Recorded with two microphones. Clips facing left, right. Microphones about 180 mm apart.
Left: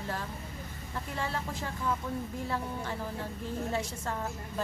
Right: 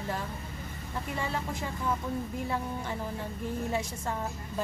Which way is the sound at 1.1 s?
15° right (ahead or behind).